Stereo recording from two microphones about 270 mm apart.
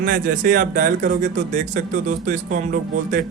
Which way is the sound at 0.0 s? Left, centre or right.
Right.